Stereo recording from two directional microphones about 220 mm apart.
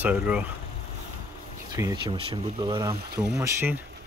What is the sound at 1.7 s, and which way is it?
Speech, 15° right (ahead or behind).